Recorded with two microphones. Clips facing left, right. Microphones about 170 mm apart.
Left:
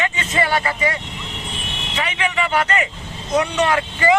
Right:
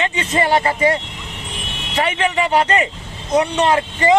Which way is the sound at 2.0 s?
40° right (ahead or behind).